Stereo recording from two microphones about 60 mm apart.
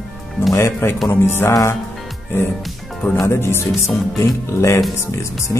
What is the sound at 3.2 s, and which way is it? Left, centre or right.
Speech, left.